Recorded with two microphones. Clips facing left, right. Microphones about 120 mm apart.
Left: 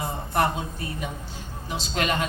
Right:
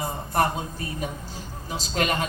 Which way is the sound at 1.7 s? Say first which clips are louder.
Right 1 dB; 40° right (ahead or behind).